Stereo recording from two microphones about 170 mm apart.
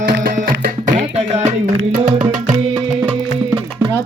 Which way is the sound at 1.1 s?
40° right (ahead or behind).